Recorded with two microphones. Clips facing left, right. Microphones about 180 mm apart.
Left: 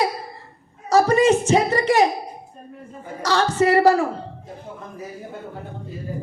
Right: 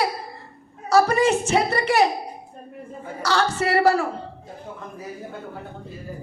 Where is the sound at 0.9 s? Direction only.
35° left (ahead or behind).